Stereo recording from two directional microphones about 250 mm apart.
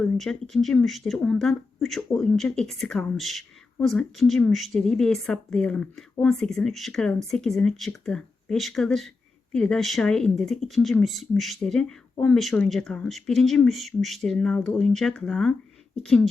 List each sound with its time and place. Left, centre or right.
0.0 s speech: centre